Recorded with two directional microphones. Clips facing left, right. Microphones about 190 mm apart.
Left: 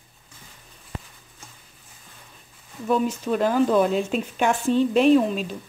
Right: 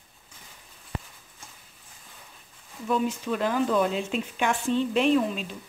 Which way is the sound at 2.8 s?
45° left (ahead or behind).